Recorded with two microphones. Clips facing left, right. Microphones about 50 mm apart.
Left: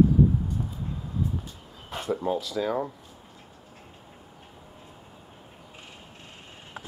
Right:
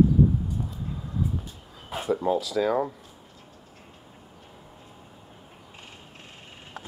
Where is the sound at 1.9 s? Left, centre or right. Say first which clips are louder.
Right 3 dB; centre.